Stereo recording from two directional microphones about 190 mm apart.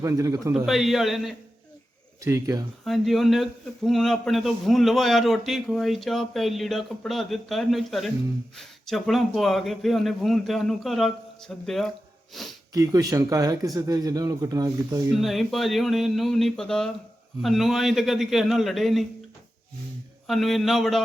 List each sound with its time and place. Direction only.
0.0 s speech: 15° right (ahead or behind)
0.5 s a man's voice: centre (ahead or behind)
2.2 s speech: 15° right (ahead or behind)
2.8 s a man's voice: centre (ahead or behind)
12.7 s speech: 20° right (ahead or behind)
15.1 s a man's voice: centre (ahead or behind)
20.2 s a man's voice: centre (ahead or behind)